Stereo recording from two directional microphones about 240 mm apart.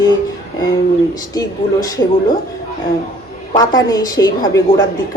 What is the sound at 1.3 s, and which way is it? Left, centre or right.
Speech, centre.